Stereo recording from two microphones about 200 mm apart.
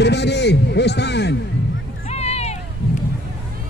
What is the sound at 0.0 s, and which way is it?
A man's voice, 60° left (ahead or behind).